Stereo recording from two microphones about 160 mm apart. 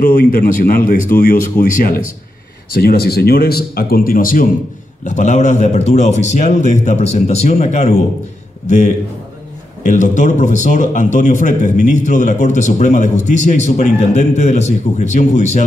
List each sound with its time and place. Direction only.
0.0 s a man's voice: 65° left (ahead or behind)
2.7 s speech: 75° left (ahead or behind); by 4.5 s 60° left (ahead or behind)
5.0 s a man's voice: 50° left (ahead or behind)